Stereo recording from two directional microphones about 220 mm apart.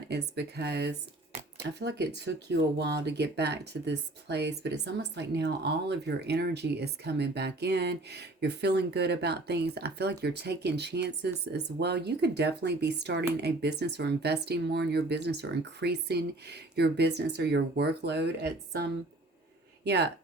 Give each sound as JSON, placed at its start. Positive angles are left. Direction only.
{"t": 0.1, "sound": "speech", "side_deg": -50}